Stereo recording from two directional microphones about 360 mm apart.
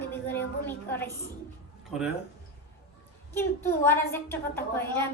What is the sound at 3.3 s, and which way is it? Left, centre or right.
A woman's voice, centre.